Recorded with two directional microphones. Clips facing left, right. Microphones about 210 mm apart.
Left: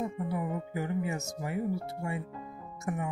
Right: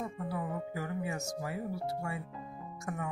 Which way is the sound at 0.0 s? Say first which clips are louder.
Left 4 dB; 20° left (ahead or behind).